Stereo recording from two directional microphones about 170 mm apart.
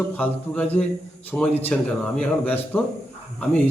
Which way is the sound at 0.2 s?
10° left (ahead or behind).